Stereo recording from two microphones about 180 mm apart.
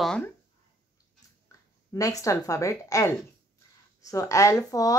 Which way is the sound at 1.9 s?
20° left (ahead or behind).